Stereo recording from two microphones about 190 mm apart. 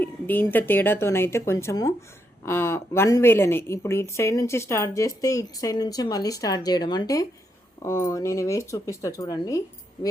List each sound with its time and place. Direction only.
0.0 s speech: 10° left (ahead or behind)